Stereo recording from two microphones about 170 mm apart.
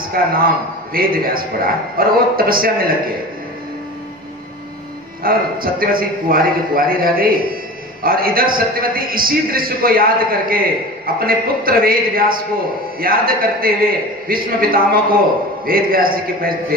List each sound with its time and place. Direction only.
0.1 s a man's voice: 60° right (ahead or behind)
5.2 s a man's voice: 60° right (ahead or behind)